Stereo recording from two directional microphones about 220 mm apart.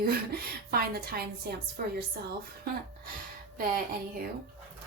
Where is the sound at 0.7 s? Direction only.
40° right (ahead or behind).